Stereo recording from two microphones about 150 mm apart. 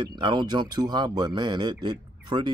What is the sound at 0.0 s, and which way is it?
Speech, 30° right (ahead or behind).